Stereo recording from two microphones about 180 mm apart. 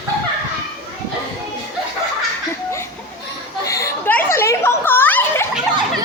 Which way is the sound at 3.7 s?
15° left (ahead or behind).